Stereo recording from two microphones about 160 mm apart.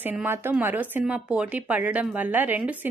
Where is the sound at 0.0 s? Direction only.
10° right (ahead or behind).